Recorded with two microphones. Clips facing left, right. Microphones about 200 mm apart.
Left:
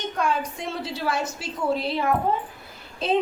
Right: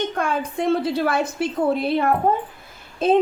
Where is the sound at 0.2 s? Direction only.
55° right (ahead or behind).